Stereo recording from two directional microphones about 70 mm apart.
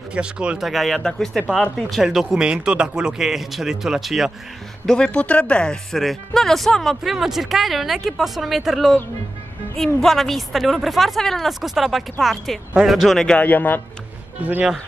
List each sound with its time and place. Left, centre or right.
0.1 s speech: centre
0.6 s speech: centre
4.8 s speech: centre
13.4 s speech: left
14.4 s speech: right